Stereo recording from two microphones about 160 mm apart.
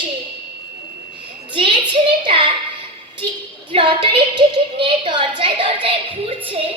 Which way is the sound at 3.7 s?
30° right (ahead or behind).